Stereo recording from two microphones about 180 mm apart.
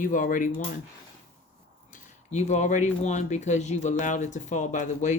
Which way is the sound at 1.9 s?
40° left (ahead or behind).